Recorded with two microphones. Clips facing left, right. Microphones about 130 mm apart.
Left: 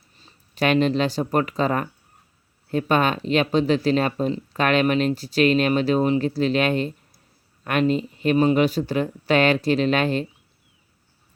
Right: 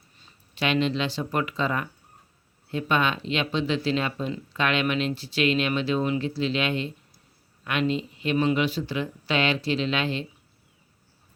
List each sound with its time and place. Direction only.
0.5 s speech: 45° left (ahead or behind)